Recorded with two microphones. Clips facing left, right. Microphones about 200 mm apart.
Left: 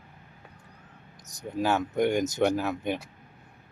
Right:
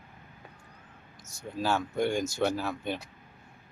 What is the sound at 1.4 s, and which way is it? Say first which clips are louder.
Speech: left 3 dB; 20° left (ahead or behind).